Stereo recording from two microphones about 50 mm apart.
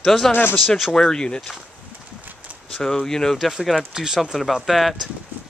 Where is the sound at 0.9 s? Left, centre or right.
Centre.